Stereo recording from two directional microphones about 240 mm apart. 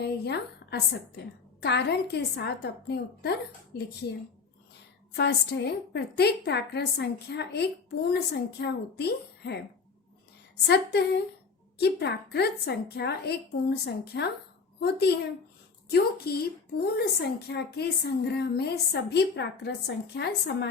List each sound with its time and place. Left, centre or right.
0.0 s a woman's voice: left
5.1 s a woman's voice: left
10.7 s a woman's voice: left